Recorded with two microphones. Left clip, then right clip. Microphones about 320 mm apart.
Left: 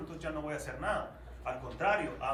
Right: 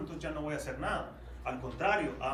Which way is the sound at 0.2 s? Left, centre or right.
Centre.